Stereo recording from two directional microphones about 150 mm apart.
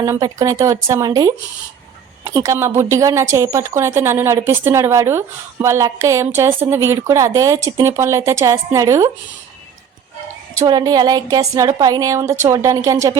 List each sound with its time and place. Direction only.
0.0 s speech: 20° right (ahead or behind)
10.5 s speech: 25° right (ahead or behind)